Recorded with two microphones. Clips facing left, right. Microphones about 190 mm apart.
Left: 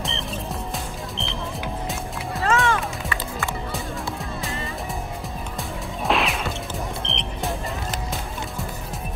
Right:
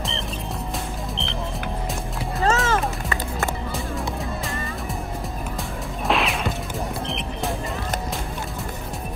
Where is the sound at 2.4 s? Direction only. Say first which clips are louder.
Right 1 dB; 40° right (ahead or behind).